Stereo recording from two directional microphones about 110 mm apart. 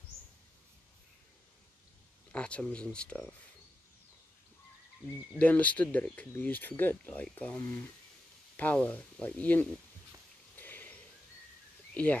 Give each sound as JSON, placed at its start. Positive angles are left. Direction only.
{"t": 2.3, "sound": "speech", "side_deg": 10}
{"t": 5.4, "sound": "speech", "side_deg": 10}
{"t": 10.5, "sound": "a sound", "side_deg": 15}
{"t": 11.9, "sound": "speech", "side_deg": 15}